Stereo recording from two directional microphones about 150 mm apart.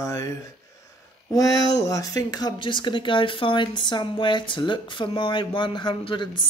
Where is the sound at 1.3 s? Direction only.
25° left (ahead or behind).